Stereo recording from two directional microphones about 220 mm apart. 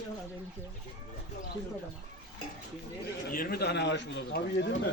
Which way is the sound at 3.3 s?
40° left (ahead or behind).